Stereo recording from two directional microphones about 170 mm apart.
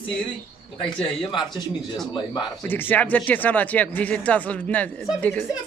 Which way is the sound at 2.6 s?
10° left (ahead or behind).